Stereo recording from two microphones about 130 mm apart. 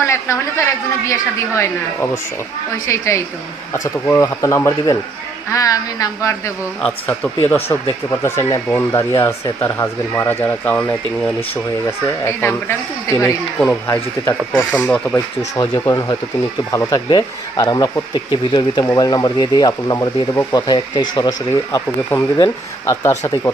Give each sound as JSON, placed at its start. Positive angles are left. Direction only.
{"t": 0.0, "sound": "a woman's voice", "side_deg": 20}
{"t": 13.1, "sound": "speech", "side_deg": 5}
{"t": 13.7, "sound": "a woman's voice", "side_deg": 20}
{"t": 15.4, "sound": "a woman's voice", "side_deg": 30}
{"t": 22.1, "sound": "a woman's voice", "side_deg": 15}